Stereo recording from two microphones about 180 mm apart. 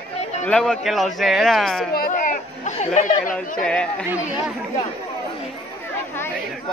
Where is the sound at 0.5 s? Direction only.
5° left (ahead or behind).